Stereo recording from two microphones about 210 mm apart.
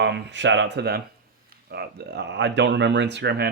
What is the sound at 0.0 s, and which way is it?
Speech, 55° right (ahead or behind).